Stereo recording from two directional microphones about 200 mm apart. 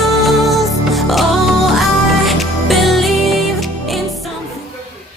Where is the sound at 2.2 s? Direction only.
Centre (ahead or behind).